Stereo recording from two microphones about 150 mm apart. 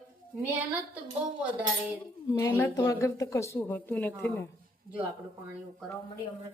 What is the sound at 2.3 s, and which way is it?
Speech, 15° left (ahead or behind).